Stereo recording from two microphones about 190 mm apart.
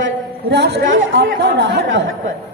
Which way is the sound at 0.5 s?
60° right (ahead or behind).